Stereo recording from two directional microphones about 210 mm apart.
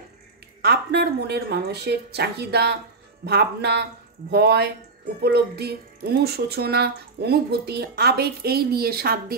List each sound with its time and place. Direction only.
0.6 s speech: 50° right (ahead or behind)